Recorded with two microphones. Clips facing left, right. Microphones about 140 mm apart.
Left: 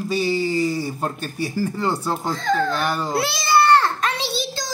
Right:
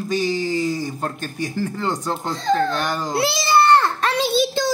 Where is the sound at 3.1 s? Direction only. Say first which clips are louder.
Right 2 dB; 20° right (ahead or behind).